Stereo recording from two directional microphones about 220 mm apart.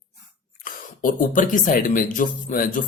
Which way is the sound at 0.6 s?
35° left (ahead or behind).